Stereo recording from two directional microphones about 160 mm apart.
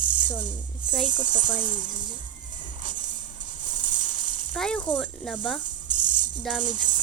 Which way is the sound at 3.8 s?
50° right (ahead or behind).